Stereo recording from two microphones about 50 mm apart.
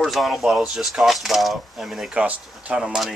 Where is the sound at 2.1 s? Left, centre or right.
Right.